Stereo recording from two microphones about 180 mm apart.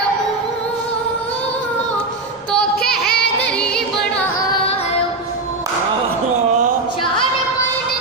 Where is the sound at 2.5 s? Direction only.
5° left (ahead or behind).